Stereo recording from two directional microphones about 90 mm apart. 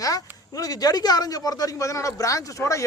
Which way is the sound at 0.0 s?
40° left (ahead or behind).